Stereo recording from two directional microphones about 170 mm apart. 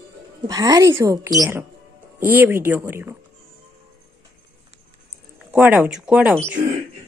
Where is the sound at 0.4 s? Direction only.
20° right (ahead or behind).